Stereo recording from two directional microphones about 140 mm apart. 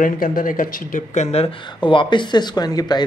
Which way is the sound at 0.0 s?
90° left.